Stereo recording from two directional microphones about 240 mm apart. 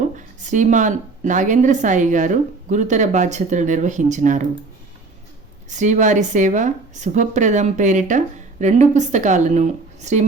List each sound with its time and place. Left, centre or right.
0.2 s a woman's voice: right
5.6 s a woman's voice: right